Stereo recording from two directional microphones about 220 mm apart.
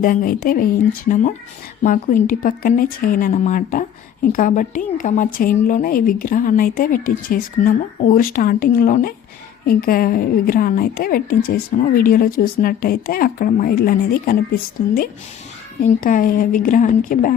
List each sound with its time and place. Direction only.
0.0 s speech: 40° left (ahead or behind)